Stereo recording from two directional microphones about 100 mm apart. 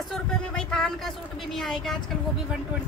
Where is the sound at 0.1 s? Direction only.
10° left (ahead or behind).